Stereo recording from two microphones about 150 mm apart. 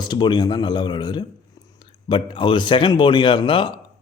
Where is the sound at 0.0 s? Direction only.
30° left (ahead or behind).